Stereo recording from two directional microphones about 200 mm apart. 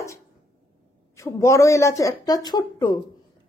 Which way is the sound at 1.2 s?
15° left (ahead or behind).